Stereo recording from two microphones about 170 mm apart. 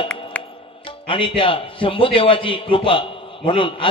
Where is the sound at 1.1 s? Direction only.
30° left (ahead or behind).